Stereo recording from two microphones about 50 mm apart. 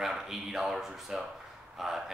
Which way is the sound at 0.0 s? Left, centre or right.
Centre.